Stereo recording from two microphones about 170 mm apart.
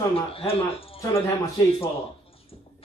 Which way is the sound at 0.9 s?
15° left (ahead or behind).